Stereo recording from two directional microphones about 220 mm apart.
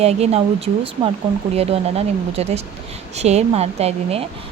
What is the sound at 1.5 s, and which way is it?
A woman's voice, 25° right (ahead or behind).